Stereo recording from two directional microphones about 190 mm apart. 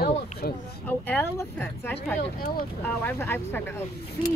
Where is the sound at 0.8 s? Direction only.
10° left (ahead or behind).